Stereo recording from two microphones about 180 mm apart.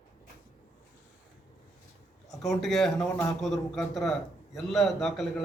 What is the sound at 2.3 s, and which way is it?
A man's voice, centre (ahead or behind).